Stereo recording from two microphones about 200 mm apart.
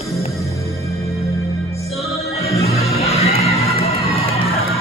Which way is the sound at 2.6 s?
30° left (ahead or behind).